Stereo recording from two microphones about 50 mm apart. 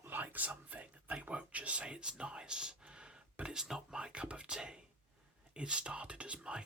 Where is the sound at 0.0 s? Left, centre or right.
Right; by 3.2 s centre.